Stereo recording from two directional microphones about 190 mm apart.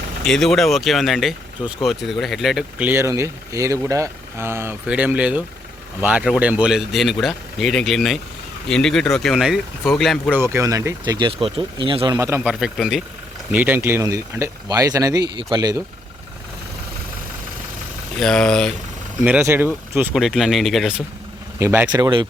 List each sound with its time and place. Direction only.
0.3 s speech: centre (ahead or behind)
10.4 s speech: 15° right (ahead or behind)
12.4 s speech: 5° right (ahead or behind)
13.5 s speech: 10° right (ahead or behind)
18.2 s speech: 5° left (ahead or behind)
19.2 s speech: 10° right (ahead or behind)
21.6 s speech: 15° right (ahead or behind)